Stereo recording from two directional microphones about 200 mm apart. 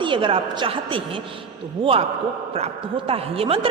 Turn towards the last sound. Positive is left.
turn(degrees=-30)  # may be behind; listen again after turning